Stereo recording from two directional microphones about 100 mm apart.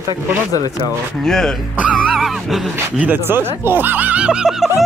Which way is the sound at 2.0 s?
Centre (ahead or behind).